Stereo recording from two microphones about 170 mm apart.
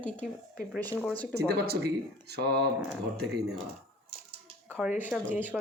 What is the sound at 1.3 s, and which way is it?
Speech, 70° right (ahead or behind).